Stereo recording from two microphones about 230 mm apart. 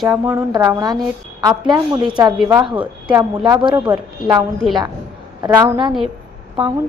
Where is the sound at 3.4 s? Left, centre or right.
Centre.